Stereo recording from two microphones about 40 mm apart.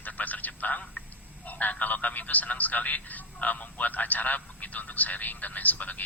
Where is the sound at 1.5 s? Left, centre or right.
Left.